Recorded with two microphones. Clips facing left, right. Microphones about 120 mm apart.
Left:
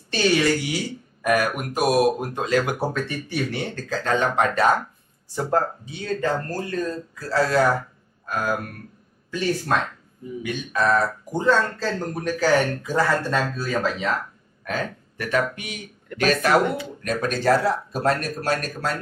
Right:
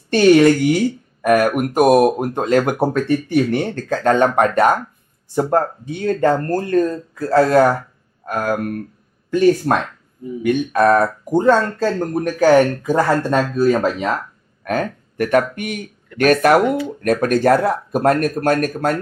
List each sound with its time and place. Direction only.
0.1 s speech: 55° right (ahead or behind)